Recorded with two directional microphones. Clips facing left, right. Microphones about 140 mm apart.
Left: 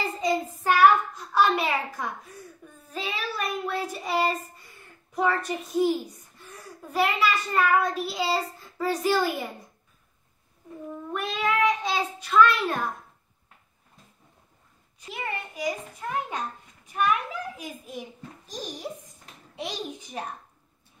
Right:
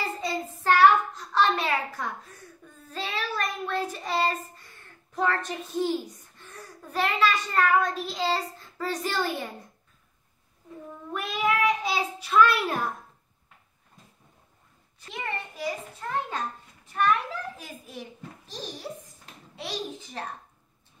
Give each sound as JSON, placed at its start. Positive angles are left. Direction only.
{"t": 0.2, "sound": "child singing", "side_deg": 15}
{"t": 11.1, "sound": "child singing", "side_deg": -5}
{"t": 15.0, "sound": "a child's voice", "side_deg": 10}